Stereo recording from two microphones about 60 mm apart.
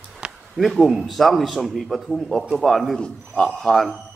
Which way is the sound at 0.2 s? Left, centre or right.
Centre.